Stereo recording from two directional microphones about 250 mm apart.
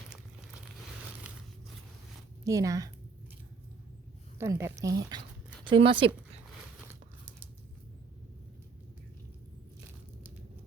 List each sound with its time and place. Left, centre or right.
2.4 s a woman's voice: centre
4.4 s speech: centre